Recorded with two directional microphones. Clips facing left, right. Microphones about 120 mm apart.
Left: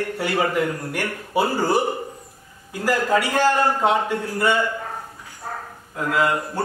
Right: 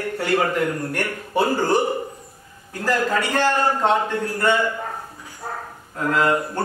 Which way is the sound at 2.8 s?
10° left (ahead or behind).